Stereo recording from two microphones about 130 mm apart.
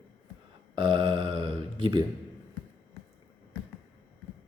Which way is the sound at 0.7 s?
40° right (ahead or behind).